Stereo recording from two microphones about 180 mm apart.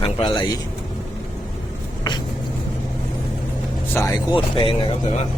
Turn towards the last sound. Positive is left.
turn(degrees=25)  # may be behind; listen again after turning